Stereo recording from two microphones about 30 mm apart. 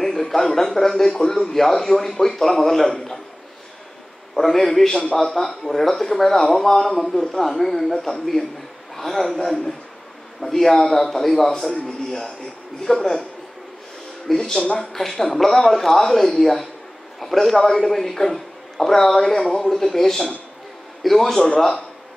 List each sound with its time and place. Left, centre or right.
0.0 s a man's voice: centre
4.4 s speech: centre
8.9 s speech: centre
14.2 s a man's voice: centre